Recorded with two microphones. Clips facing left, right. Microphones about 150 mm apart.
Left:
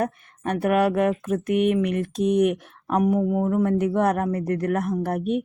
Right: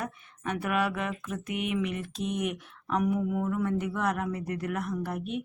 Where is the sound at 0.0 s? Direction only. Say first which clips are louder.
Left 9 dB; 50° left (ahead or behind).